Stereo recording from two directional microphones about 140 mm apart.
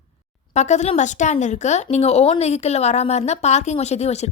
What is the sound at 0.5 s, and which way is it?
A woman's voice, 55° left (ahead or behind).